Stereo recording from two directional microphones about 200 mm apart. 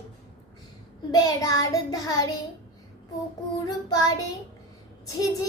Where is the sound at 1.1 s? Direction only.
20° left (ahead or behind).